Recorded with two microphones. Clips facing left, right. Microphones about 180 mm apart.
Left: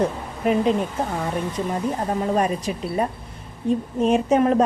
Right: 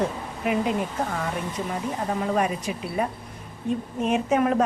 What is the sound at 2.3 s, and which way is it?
Speech, 35° left (ahead or behind).